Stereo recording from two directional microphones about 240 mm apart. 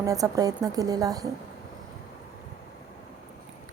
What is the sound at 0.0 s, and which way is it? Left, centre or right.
A woman's voice, centre.